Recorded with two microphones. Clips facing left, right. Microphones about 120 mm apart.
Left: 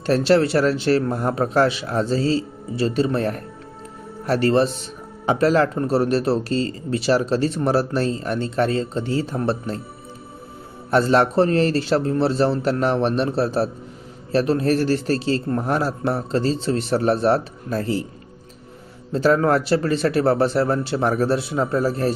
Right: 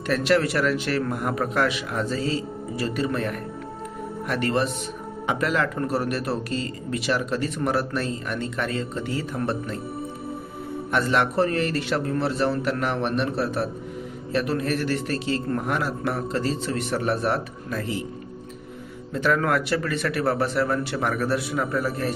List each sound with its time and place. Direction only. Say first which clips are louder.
0.0 s speech: left 5 dB; 30° left (ahead or behind)
10.9 s speech: left 6 dB; 35° left (ahead or behind)
19.1 s speech: left 5 dB; 30° left (ahead or behind)